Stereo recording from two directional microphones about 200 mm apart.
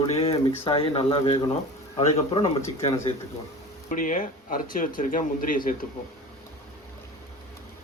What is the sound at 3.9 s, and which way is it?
Speech, 40° left (ahead or behind).